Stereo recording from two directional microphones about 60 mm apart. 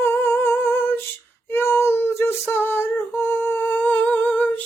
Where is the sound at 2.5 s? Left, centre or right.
Left.